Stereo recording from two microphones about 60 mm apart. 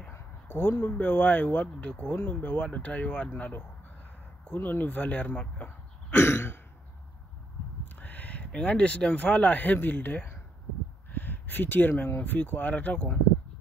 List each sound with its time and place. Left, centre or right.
0.1 s speech: left
6.1 s throat clearing: left
7.8 s a sound: left
8.5 s speech: left